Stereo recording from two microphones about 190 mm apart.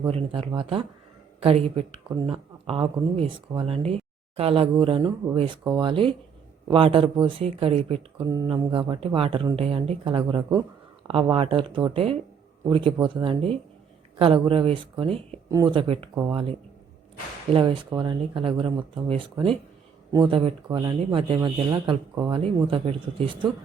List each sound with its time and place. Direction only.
0.1 s speech: 30° right (ahead or behind)
8.3 s speech: 20° right (ahead or behind)
8.9 s speech: 30° right (ahead or behind)
15.4 s speech: 15° right (ahead or behind)
15.7 s speech: 25° right (ahead or behind)